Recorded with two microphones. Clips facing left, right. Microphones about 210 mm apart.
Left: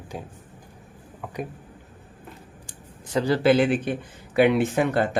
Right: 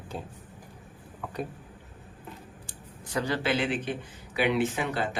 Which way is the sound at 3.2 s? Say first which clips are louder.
Left 9 dB; 40° left (ahead or behind).